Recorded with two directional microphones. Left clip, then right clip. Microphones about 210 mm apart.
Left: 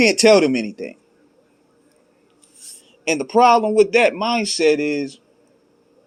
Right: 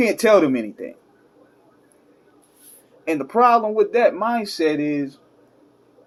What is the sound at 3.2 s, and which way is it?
Speech, 30° left (ahead or behind).